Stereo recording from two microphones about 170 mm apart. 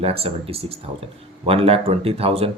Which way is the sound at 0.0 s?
35° right (ahead or behind).